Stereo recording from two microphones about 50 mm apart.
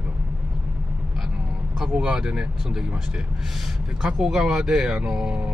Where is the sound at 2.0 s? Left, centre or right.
Centre.